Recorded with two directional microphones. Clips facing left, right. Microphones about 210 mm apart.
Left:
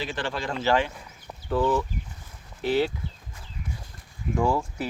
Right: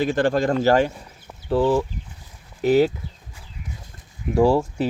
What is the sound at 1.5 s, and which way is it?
Speech, 30° right (ahead or behind).